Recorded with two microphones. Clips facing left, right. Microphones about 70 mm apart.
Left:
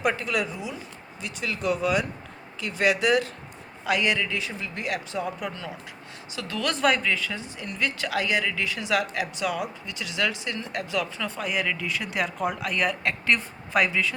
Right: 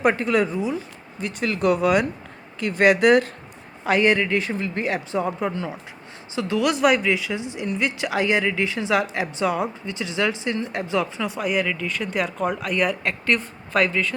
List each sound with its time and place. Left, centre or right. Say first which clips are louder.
0.0 s speech: right 6 dB; right
1.2 s speech: right 7 dB; right
3.8 s speech: right 6 dB; right
6.3 s speech: right 7 dB; centre
11.3 s speech: right 4 dB; centre